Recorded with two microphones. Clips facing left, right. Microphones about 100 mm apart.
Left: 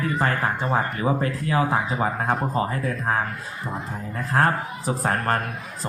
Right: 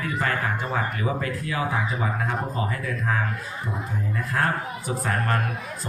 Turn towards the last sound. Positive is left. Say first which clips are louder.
# left 2 dB
turn(degrees=35)  # may be behind; listen again after turning